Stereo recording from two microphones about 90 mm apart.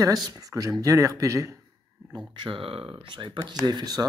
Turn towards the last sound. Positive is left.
turn(degrees=-50)  # may be behind; listen again after turning